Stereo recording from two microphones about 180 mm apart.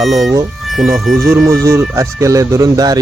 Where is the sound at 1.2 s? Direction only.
15° right (ahead or behind).